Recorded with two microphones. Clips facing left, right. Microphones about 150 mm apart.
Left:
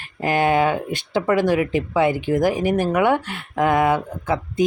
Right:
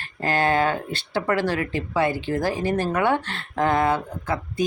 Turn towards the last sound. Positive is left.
turn(degrees=15)  # may be behind; listen again after turning